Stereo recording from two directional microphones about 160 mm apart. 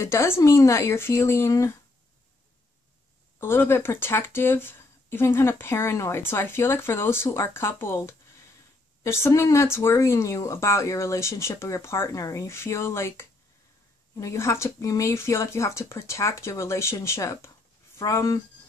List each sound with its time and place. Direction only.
0.0 s speech: 15° left (ahead or behind)
3.3 s speech: 15° left (ahead or behind)